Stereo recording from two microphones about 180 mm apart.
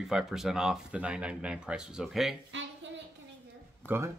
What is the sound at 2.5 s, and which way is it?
Speech, 90° right.